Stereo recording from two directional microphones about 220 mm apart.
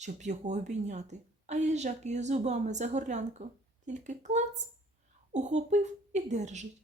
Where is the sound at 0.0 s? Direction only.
30° right (ahead or behind).